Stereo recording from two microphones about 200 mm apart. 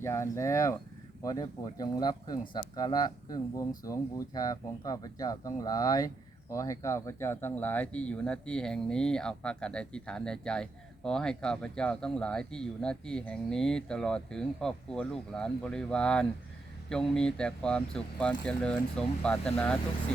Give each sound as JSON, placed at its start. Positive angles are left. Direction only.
{"t": 0.0, "sound": "speech", "side_deg": 15}